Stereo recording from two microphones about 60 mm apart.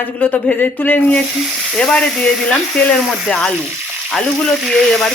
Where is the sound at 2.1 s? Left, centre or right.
Centre.